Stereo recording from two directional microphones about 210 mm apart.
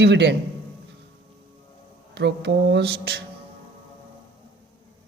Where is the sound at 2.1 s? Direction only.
55° right (ahead or behind).